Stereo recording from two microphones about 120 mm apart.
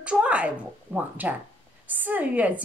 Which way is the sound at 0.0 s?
10° right (ahead or behind).